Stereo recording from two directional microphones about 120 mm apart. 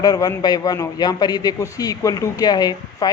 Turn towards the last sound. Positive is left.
turn(degrees=35)  # may be behind; listen again after turning